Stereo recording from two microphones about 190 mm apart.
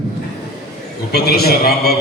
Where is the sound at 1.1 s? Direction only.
55° left (ahead or behind).